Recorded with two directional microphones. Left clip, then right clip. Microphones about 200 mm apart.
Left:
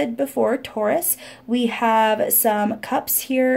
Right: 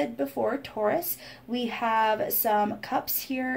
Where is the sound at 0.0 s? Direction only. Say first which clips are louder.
Left 7 dB; 45° left (ahead or behind).